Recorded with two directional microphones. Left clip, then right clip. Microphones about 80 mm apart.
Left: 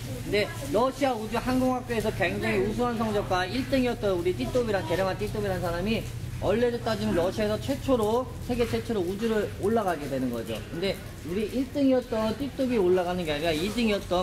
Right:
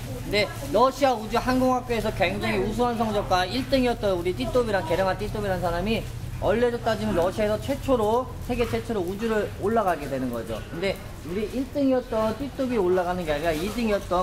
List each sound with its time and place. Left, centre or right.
0.3 s speech: right; by 10.4 s centre
11.9 s speech: centre
12.3 s speech: left